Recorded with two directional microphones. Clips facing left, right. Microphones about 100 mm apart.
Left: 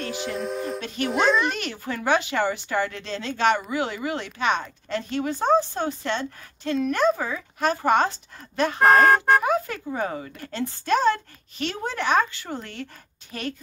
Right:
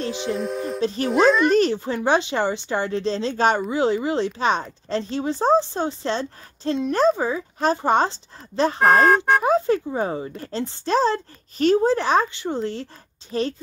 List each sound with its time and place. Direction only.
0.0 s a sound: 25° right (ahead or behind)
0.3 s speech: centre (ahead or behind)
0.7 s speech: 30° right (ahead or behind)
1.1 s speech: centre (ahead or behind)
1.5 s speech: 35° right (ahead or behind)
8.7 s speech: centre (ahead or behind)
9.4 s speech: 30° right (ahead or behind)